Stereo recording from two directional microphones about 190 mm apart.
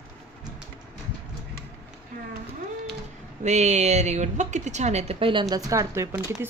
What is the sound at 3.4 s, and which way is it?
A woman's voice, 35° right (ahead or behind).